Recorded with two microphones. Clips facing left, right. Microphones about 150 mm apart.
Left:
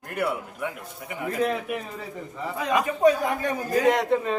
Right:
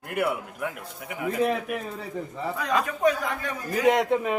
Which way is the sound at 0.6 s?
Centre (ahead or behind).